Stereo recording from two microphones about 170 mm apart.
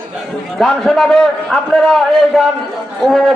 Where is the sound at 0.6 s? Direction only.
Centre (ahead or behind).